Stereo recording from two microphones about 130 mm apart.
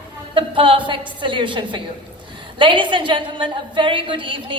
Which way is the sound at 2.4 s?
40° right (ahead or behind).